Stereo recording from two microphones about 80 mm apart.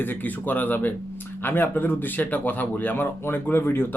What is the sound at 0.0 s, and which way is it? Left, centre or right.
Speech, left.